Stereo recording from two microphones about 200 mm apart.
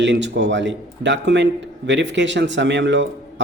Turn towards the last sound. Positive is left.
turn(degrees=-65)  # may be behind; listen again after turning